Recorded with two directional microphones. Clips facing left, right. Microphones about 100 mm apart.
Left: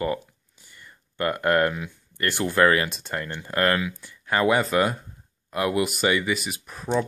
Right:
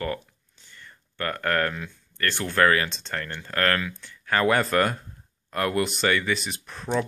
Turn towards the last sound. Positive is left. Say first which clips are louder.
# left 2 dB
turn(degrees=10)  # may be behind; listen again after turning